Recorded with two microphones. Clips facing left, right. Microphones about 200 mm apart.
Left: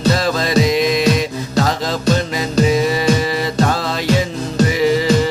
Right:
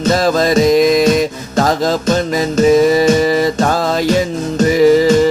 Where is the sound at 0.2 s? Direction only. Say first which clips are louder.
Right 4 dB; 45° right (ahead or behind).